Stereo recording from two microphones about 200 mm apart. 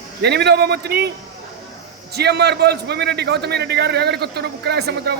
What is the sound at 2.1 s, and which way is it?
A man's voice, 55° right (ahead or behind).